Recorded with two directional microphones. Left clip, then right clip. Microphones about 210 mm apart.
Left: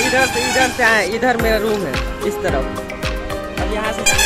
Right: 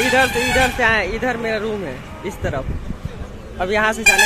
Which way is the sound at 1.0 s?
20° left (ahead or behind).